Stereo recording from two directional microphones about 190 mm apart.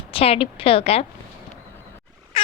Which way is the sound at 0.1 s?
30° left (ahead or behind).